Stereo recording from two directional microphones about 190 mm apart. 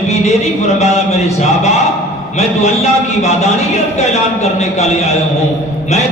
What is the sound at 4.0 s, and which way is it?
Speech, 35° left (ahead or behind).